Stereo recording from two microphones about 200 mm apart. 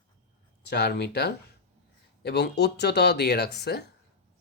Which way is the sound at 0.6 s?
55° left (ahead or behind).